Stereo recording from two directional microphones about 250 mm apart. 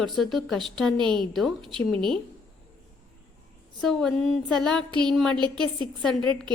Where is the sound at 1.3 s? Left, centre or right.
Centre.